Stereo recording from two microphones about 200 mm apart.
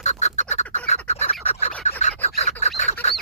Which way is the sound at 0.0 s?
35° left (ahead or behind).